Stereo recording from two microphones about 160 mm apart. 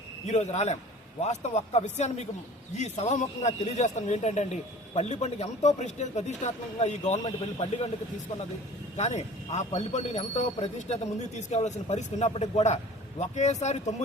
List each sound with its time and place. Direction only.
0.3 s speech: 45° left (ahead or behind)
9.0 s speech: 45° left (ahead or behind)